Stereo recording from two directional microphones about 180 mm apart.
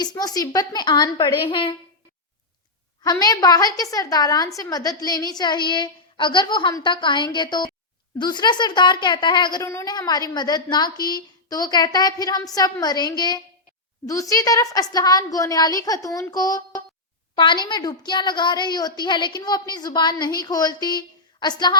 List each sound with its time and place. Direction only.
0.0 s a woman's voice: 20° left (ahead or behind)
3.0 s a woman's voice: 20° left (ahead or behind)